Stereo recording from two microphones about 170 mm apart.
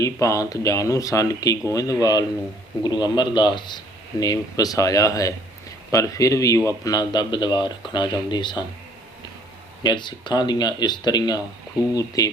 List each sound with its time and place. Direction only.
0.0 s speech: 20° left (ahead or behind)
9.8 s speech: 25° left (ahead or behind)